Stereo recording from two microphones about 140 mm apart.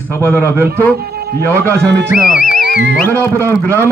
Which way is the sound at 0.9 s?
90° right.